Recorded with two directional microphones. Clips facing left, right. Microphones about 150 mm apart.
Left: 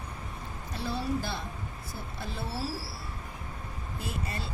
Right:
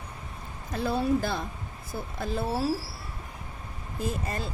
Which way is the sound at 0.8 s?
50° right (ahead or behind).